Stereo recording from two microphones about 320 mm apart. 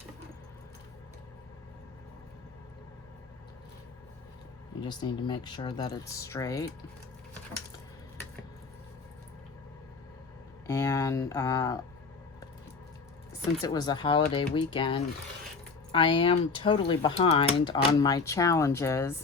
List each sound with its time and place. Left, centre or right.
4.8 s speech: centre
10.7 s speech: centre
13.6 s speech: centre